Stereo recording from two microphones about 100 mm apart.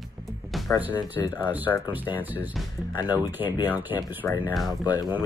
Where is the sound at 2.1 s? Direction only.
20° right (ahead or behind).